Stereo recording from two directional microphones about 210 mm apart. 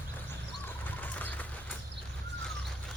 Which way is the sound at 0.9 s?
5° left (ahead or behind).